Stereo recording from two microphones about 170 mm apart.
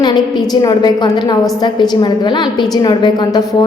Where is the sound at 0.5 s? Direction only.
25° left (ahead or behind).